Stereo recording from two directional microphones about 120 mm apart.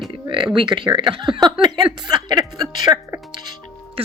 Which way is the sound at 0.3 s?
45° right (ahead or behind).